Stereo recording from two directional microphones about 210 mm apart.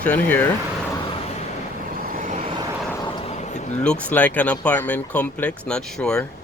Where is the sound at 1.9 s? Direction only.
40° right (ahead or behind).